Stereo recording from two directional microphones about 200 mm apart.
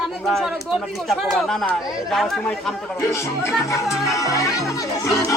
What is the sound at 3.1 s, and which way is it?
Speech, 15° left (ahead or behind).